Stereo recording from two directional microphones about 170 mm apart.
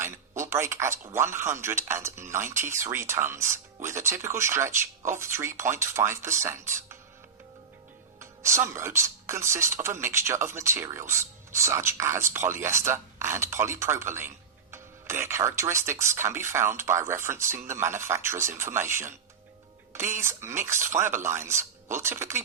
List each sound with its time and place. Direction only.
0.0 s speech: 15° right (ahead or behind)
8.2 s speech: 15° right (ahead or behind)